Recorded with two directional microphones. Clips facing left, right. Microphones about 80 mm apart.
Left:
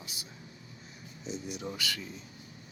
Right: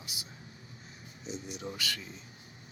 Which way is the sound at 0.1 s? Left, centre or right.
Centre.